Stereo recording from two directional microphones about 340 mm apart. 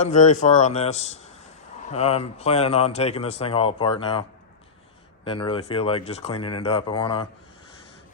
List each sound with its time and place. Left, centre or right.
0.0 s a man's voice: left